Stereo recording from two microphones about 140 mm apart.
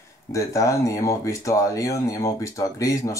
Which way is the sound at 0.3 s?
20° left (ahead or behind).